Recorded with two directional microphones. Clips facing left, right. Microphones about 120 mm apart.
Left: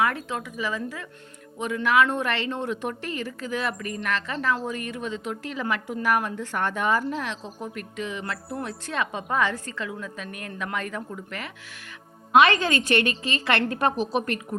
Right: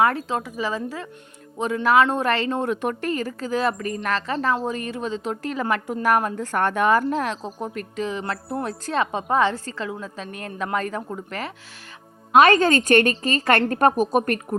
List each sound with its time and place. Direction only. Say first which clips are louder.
0.0 s a woman's voice: right 5 dB; 35° right (ahead or behind); by 7.0 s 55° right (ahead or behind)
7.1 s a woman's voice: right 6 dB; 40° right (ahead or behind)